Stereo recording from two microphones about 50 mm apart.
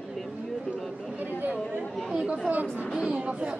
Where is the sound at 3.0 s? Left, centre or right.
Centre.